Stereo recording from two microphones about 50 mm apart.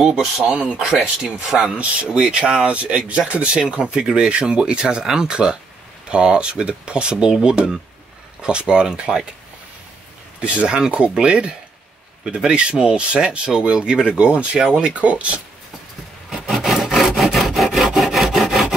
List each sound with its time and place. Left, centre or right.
0.0 s speech: centre
10.4 s speech: right
16.3 s wood: centre